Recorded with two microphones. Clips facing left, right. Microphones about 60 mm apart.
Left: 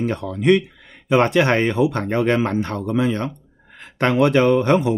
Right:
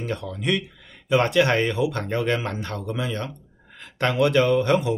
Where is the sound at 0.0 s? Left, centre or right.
Left.